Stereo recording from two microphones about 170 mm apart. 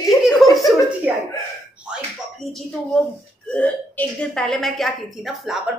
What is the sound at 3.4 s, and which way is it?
A woman's voice, 10° left (ahead or behind).